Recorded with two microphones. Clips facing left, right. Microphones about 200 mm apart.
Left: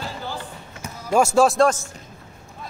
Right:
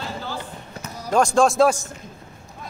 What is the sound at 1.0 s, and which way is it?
Speech, 10° left (ahead or behind).